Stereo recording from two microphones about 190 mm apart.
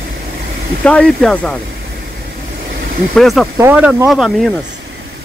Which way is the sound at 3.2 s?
Centre (ahead or behind).